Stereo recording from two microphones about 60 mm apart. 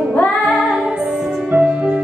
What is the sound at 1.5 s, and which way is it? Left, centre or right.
Music, centre.